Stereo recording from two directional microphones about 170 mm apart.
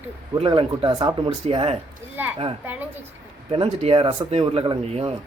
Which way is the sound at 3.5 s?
35° right (ahead or behind).